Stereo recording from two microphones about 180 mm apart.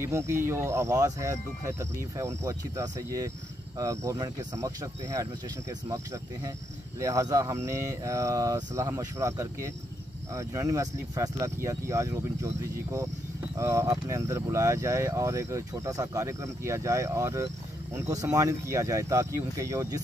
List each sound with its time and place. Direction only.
0.0 s speech: 15° right (ahead or behind)
7.0 s speech: 20° right (ahead or behind)
13.6 s speech: 15° right (ahead or behind)